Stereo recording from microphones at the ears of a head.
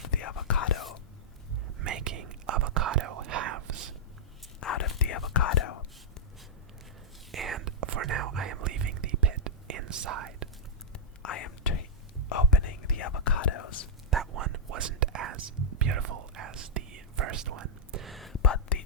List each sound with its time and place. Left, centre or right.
0.0 s whispering: left
1.8 s whispering: right
4.6 s whispering: left
7.3 s whispering: right
11.2 s whispering: left
14.3 s whispering: right
18.3 s whispering: left